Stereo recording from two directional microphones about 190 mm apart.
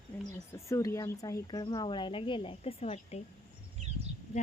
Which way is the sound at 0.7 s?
15° left (ahead or behind).